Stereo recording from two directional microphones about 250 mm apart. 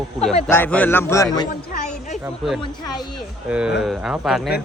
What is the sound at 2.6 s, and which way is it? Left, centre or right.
Speech, centre.